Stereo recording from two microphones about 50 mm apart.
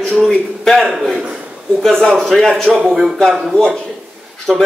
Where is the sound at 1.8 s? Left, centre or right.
Centre.